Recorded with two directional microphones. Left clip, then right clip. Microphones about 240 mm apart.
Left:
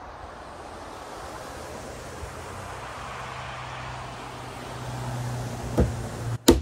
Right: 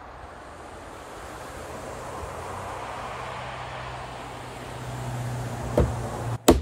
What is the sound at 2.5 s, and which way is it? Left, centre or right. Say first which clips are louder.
Vehicle: right 2 dB; right.